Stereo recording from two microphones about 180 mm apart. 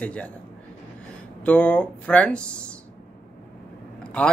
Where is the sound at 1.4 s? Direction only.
5° left (ahead or behind).